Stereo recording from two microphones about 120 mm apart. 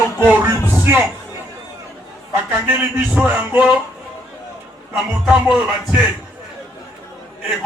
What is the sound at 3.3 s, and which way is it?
Speech, 15° right (ahead or behind).